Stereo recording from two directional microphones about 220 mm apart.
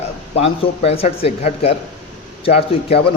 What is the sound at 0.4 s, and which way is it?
Speech, 25° left (ahead or behind).